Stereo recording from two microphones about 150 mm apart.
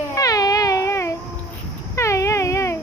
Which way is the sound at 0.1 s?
25° left (ahead or behind).